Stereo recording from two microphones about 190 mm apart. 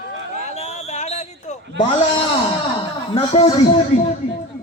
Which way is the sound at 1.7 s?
25° left (ahead or behind).